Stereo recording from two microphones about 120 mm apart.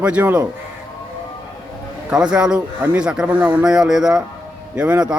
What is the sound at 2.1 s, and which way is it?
A man's voice, 5° right (ahead or behind).